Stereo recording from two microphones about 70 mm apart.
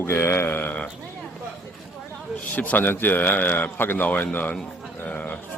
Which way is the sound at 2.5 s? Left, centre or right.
Left.